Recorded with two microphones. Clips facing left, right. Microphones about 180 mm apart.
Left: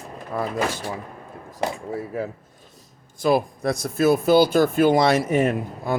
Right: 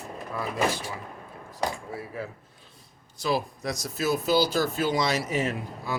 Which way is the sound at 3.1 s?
50° left (ahead or behind).